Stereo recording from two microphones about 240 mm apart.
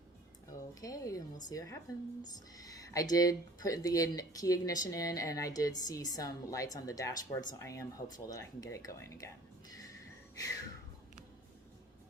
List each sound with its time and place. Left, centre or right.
0.7 s speech: centre
10.3 s music: centre